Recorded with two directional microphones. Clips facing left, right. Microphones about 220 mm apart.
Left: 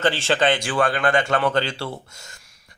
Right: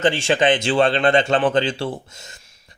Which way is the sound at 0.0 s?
15° right (ahead or behind).